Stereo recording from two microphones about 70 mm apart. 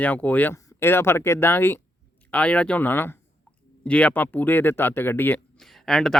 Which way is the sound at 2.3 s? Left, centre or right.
Centre.